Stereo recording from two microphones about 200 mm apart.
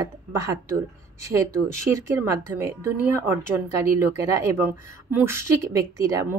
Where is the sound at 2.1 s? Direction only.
10° right (ahead or behind).